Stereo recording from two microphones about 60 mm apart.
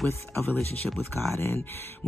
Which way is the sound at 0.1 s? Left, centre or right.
Left.